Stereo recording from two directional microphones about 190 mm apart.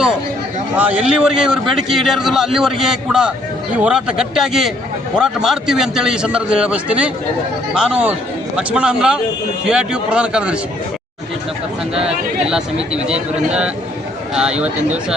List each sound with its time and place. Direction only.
0.8 s a man's voice: 5° right (ahead or behind)
12.0 s a man's voice: 5° right (ahead or behind)